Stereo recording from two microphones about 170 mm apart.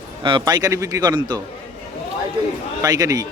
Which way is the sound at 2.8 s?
20° right (ahead or behind).